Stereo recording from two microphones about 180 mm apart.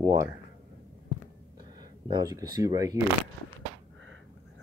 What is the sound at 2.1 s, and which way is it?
Speech, 20° right (ahead or behind).